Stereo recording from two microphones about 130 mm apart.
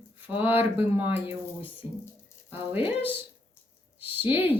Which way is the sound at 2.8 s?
10° right (ahead or behind).